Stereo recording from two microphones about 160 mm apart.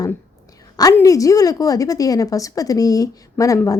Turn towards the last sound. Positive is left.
turn(degrees=20)  # may be behind; listen again after turning